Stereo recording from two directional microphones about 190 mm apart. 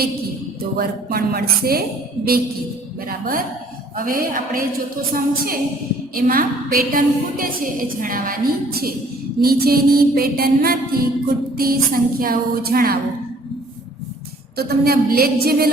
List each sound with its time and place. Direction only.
0.8 s music: 55° right (ahead or behind)
3.1 s music: 50° right (ahead or behind)
14.5 s music: 55° right (ahead or behind)